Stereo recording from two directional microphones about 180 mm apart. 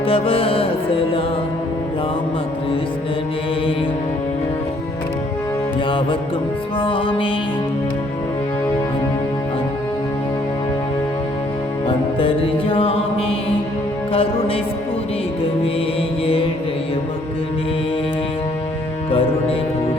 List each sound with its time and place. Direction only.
0.0 s music: 30° left (ahead or behind)
6.7 s music: 30° left (ahead or behind)
11.9 s music: 30° left (ahead or behind)